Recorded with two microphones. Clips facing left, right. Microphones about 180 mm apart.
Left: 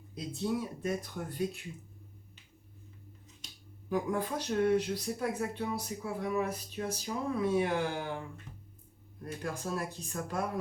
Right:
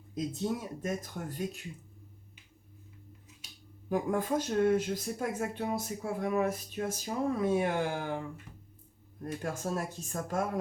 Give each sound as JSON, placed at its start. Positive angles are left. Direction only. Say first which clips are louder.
{"t": 0.1, "sound": "speech", "louder": "right 1 dB", "side_deg": -45}
{"t": 3.8, "sound": "speech", "louder": "right 2 dB", "side_deg": -45}
{"t": 9.2, "sound": "speech", "louder": "right 2 dB", "side_deg": -45}